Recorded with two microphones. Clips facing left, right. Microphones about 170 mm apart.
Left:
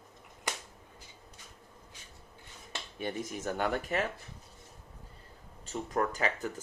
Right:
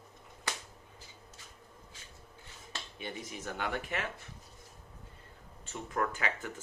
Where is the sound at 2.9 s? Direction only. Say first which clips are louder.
Left 7 dB; 45° left (ahead or behind).